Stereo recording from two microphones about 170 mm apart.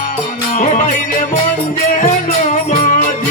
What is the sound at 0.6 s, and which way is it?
Music, 45° left (ahead or behind).